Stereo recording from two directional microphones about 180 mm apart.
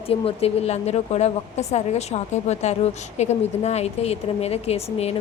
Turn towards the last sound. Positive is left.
turn(degrees=35)  # may be behind; listen again after turning